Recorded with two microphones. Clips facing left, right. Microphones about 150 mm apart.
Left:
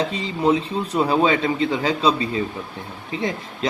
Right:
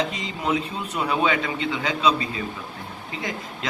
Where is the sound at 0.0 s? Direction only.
30° left (ahead or behind).